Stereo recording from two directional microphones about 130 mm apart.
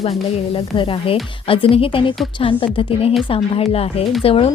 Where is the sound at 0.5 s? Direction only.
45° left (ahead or behind).